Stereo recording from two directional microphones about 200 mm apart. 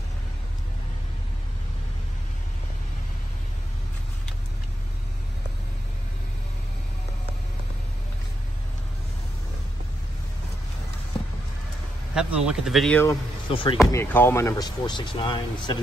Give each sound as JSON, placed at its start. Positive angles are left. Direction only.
{"t": 12.2, "sound": "speech", "side_deg": -5}
{"t": 13.5, "sound": "speech", "side_deg": 25}
{"t": 13.9, "sound": "speech", "side_deg": 10}